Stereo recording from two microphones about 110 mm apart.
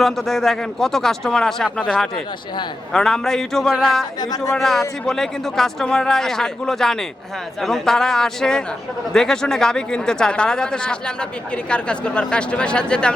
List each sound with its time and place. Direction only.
0.0 s a man's voice: centre (ahead or behind)